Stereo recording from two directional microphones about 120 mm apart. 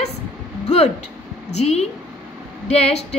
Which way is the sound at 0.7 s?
70° left (ahead or behind).